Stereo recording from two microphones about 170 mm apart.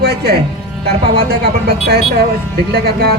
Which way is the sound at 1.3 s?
65° right (ahead or behind).